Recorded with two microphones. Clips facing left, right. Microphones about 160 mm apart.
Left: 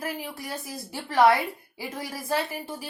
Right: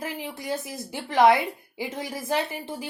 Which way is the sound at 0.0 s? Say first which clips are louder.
Right 1 dB; 20° right (ahead or behind).